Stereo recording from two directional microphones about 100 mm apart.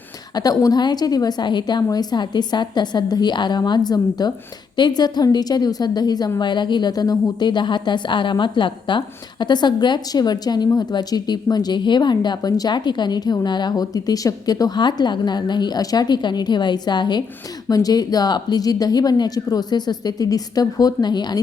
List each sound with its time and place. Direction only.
0.3 s a woman's voice: 40° left (ahead or behind)